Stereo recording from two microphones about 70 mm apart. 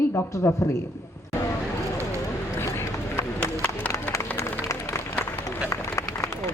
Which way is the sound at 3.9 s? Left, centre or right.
Left.